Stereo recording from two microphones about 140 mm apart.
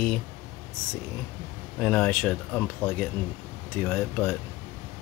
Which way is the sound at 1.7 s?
10° left (ahead or behind).